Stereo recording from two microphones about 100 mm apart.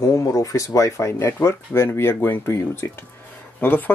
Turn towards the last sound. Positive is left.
turn(degrees=20)  # may be behind; listen again after turning